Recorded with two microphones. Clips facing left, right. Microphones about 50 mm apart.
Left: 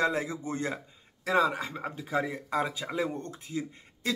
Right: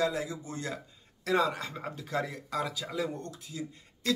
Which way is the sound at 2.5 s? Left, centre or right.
Left.